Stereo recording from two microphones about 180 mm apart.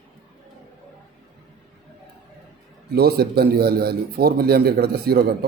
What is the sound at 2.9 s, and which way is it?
A man's voice, 60° right (ahead or behind).